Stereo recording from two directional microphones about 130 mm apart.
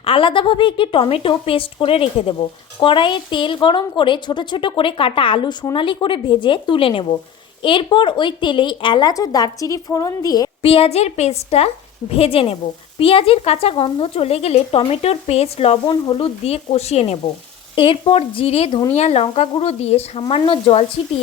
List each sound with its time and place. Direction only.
0.0 s a woman's voice: 45° left (ahead or behind)
10.6 s a woman's voice: 45° left (ahead or behind)
17.7 s a woman's voice: 40° left (ahead or behind)
20.2 s a woman's voice: 40° left (ahead or behind)